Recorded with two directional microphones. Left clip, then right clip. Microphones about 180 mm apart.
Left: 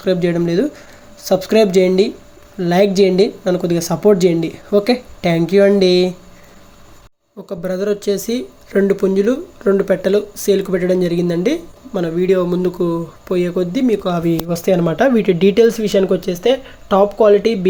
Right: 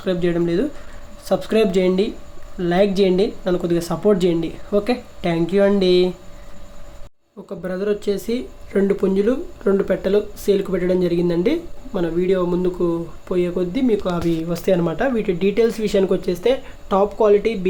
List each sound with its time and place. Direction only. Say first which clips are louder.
0.0 s a woman's voice: left 4 dB; 20° left (ahead or behind)
7.4 s speech: left 4 dB; 15° left (ahead or behind)
14.9 s a woman's voice: left 7 dB; 25° left (ahead or behind)
15.6 s speech: left 4 dB; 10° left (ahead or behind)